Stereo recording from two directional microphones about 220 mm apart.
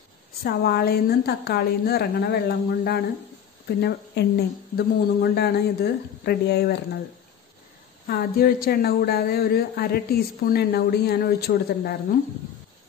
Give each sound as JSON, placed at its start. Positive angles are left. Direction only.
{"t": 0.4, "sound": "speech", "side_deg": 45}
{"t": 8.1, "sound": "speech", "side_deg": 45}